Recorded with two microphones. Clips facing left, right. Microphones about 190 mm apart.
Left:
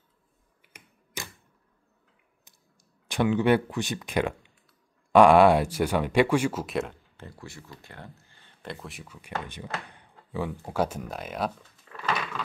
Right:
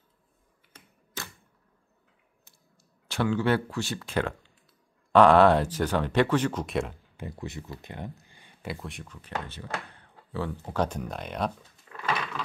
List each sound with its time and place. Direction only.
0.7 s typewriter: 15° left (ahead or behind)
3.1 s speech: 15° left (ahead or behind); by 7.0 s centre (ahead or behind)
7.2 s speech: 15° right (ahead or behind)
7.8 s a sound: 20° right (ahead or behind)
8.7 s speech: centre (ahead or behind)